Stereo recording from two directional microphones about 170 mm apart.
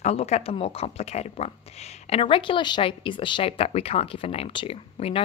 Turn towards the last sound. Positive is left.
turn(degrees=35)  # may be behind; listen again after turning